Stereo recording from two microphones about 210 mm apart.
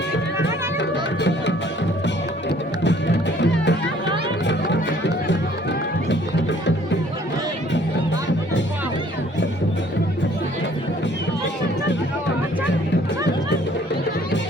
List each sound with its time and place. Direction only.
0.4 s music: 55° left (ahead or behind)
3.4 s music: 60° left (ahead or behind)